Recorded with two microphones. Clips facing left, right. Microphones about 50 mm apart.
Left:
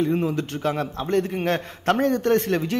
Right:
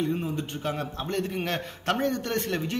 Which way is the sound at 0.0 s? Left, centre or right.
Left.